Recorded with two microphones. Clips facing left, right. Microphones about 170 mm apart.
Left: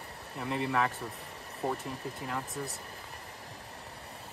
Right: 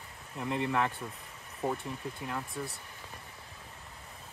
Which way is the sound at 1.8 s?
35° left (ahead or behind).